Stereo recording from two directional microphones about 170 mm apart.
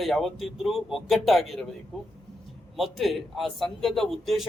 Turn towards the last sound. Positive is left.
turn(degrees=0)  # may be behind; listen again after turning